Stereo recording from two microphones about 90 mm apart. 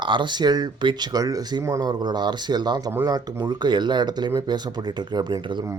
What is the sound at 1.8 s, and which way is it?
Speech, 50° right (ahead or behind).